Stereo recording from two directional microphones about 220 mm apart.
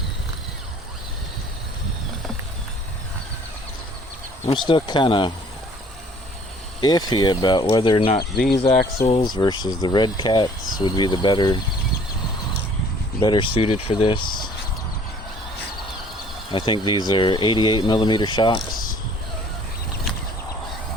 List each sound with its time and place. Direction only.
4.4 s speech: 20° left (ahead or behind)
6.8 s speech: 20° left (ahead or behind)
8.2 s speech: 45° left (ahead or behind)
9.0 s speech: 20° left (ahead or behind)
13.1 s speech: 25° left (ahead or behind)
16.5 s speech: 20° left (ahead or behind)